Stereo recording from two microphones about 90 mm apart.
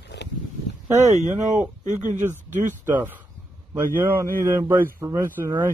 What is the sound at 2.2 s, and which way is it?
Speech, 25° right (ahead or behind).